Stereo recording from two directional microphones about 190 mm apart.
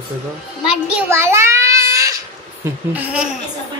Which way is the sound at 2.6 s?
10° right (ahead or behind).